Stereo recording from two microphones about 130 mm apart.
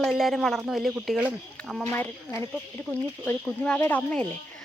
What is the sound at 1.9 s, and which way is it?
Speech, 15° left (ahead or behind).